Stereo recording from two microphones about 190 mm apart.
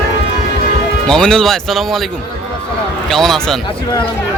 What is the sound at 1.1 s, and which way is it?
Speech, 5° left (ahead or behind).